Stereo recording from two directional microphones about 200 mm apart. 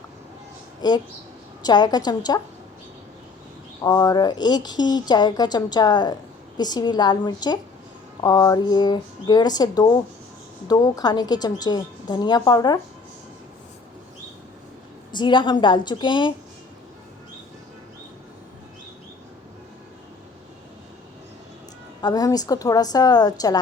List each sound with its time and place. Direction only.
0.8 s speech: 20° left (ahead or behind)
3.8 s speech: 20° left (ahead or behind)
15.1 s speech: 25° left (ahead or behind)
22.0 s speech: 20° left (ahead or behind)